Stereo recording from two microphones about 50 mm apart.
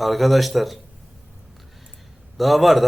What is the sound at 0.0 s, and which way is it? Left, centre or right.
Speech, centre.